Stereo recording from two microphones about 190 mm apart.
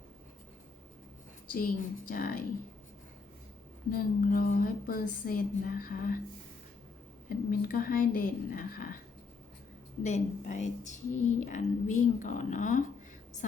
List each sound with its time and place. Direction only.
1.5 s a woman's voice: 50° left (ahead or behind)
3.9 s a woman's voice: 45° left (ahead or behind)
7.3 s a woman's voice: 50° left (ahead or behind)
10.0 s speech: 35° left (ahead or behind)